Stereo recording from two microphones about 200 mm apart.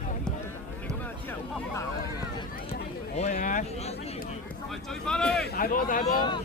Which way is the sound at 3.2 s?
35° left (ahead or behind).